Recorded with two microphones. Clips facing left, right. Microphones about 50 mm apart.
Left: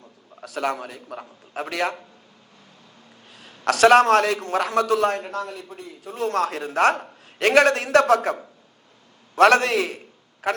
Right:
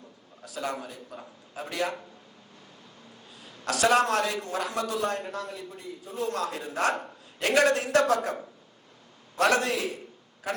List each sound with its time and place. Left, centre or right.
0.4 s a man's voice: left
3.2 s a man's voice: left